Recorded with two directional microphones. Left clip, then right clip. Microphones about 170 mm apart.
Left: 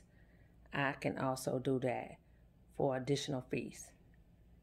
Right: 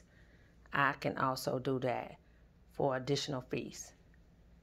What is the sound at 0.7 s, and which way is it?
Speech, 15° left (ahead or behind).